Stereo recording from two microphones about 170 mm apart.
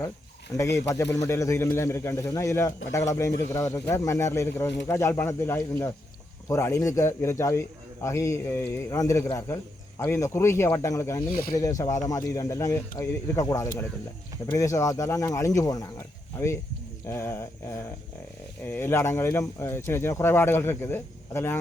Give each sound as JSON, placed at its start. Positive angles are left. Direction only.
{"t": 0.5, "sound": "speech", "side_deg": 20}
{"t": 17.1, "sound": "speech", "side_deg": 15}